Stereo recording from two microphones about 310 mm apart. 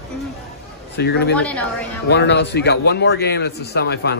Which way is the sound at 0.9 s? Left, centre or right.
Left.